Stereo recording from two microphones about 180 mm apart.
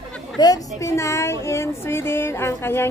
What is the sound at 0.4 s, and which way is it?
Speech, 20° left (ahead or behind).